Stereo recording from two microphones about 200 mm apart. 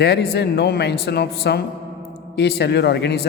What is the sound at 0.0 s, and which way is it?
A man's voice, 55° left (ahead or behind).